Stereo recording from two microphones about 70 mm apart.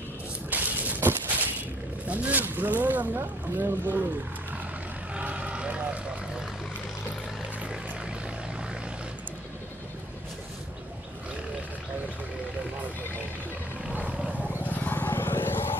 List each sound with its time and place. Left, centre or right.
0.5 s a sound: right
2.0 s speech: right
5.1 s vehicle: centre
13.8 s roaring cats: centre
14.6 s vehicle: left